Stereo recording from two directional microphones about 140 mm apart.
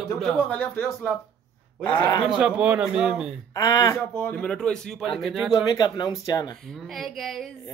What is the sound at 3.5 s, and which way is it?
Speech, 25° left (ahead or behind).